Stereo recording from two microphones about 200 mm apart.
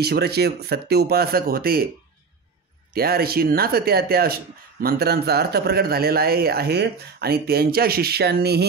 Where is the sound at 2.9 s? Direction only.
50° right (ahead or behind).